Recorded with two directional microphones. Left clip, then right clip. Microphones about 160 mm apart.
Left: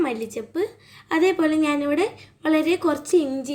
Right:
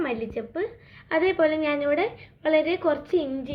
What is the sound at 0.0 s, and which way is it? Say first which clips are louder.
A woman's voice: left 3 dB; 90° left.